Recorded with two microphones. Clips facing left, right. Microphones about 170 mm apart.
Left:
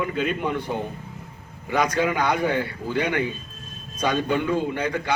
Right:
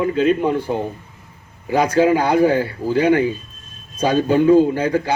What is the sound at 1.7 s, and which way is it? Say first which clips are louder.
A man's voice: right 7 dB; 30° right (ahead or behind).